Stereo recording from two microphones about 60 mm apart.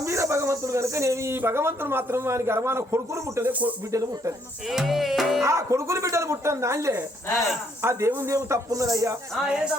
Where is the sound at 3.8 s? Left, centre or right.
Right.